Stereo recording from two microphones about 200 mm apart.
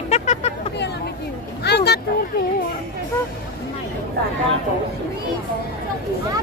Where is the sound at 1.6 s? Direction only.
55° left (ahead or behind).